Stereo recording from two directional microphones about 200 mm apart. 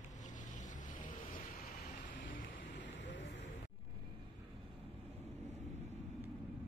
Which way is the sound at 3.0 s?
65° left (ahead or behind).